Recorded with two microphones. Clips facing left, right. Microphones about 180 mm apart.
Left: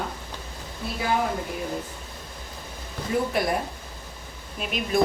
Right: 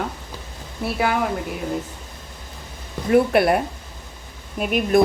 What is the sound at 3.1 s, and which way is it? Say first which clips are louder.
Speech: right 9 dB; 70° right (ahead or behind).